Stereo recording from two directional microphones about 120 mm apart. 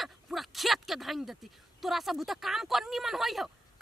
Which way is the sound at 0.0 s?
Centre (ahead or behind).